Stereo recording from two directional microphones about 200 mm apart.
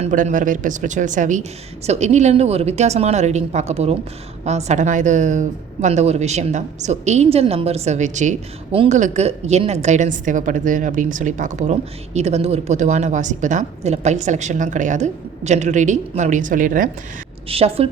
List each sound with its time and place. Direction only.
0.0 s a woman's voice: 40° right (ahead or behind)
17.5 s a woman's voice: 30° right (ahead or behind)